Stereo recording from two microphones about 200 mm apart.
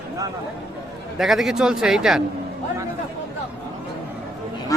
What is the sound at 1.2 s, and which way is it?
Speech, centre (ahead or behind).